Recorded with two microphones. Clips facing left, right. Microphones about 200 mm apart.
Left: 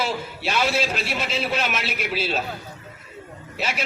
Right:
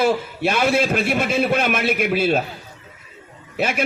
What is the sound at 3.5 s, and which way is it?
Speech, 50° right (ahead or behind).